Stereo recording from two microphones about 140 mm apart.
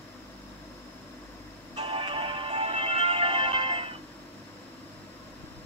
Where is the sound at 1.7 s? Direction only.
40° right (ahead or behind).